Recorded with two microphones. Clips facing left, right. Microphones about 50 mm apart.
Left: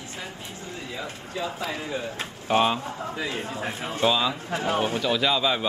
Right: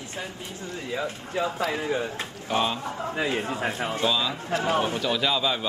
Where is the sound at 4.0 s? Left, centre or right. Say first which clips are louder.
Left 4 dB; centre.